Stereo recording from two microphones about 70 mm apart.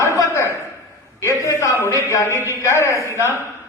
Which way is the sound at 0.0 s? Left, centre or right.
Left.